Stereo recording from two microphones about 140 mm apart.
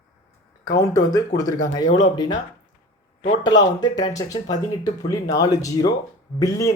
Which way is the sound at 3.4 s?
30° left (ahead or behind).